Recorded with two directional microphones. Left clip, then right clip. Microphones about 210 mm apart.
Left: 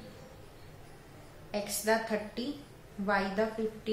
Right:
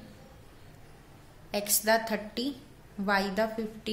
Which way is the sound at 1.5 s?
55° right (ahead or behind).